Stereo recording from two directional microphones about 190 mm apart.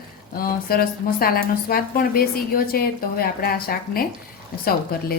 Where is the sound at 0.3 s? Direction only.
50° left (ahead or behind).